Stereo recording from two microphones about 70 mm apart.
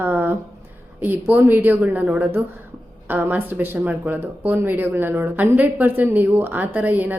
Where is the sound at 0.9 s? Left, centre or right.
Right.